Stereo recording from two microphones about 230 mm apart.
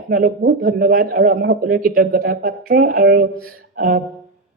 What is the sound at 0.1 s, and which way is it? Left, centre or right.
Speech, right.